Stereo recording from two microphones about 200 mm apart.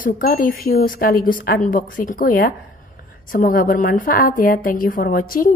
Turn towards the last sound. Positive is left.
turn(degrees=45)  # may be behind; listen again after turning